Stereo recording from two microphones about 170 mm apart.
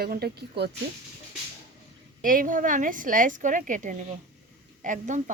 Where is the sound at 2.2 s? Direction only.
55° right (ahead or behind).